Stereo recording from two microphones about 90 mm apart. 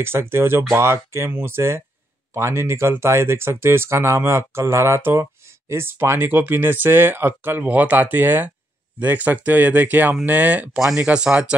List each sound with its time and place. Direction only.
0.0 s speech: 25° right (ahead or behind)
10.8 s speech: 5° right (ahead or behind)